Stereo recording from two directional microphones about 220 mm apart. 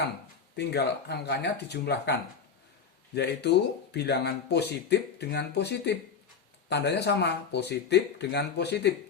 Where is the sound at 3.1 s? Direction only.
50° left (ahead or behind).